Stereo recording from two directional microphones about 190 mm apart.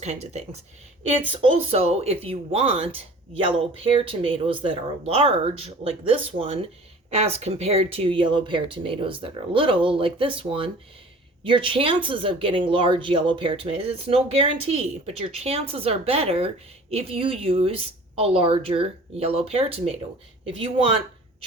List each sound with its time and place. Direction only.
0.0 s speech: 35° right (ahead or behind)